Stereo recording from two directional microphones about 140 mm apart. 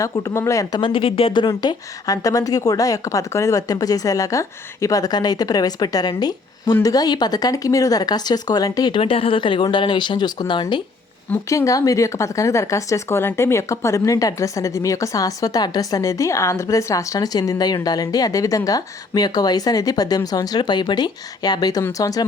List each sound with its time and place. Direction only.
0.0 s speech: 20° left (ahead or behind)
9.0 s speech: 40° left (ahead or behind)
11.3 s speech: 20° left (ahead or behind)